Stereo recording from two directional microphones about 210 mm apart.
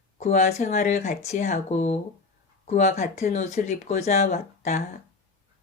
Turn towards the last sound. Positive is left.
turn(degrees=35)  # may be behind; listen again after turning